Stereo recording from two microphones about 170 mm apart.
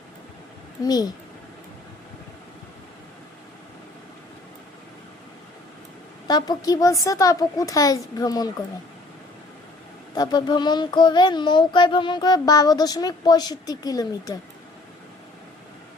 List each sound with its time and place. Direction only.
0.9 s speech: 25° left (ahead or behind)
6.2 s speech: 25° left (ahead or behind)
10.2 s speech: 25° left (ahead or behind)